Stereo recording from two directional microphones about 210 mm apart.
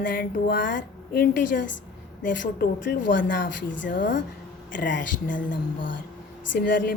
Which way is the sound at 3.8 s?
40° left (ahead or behind).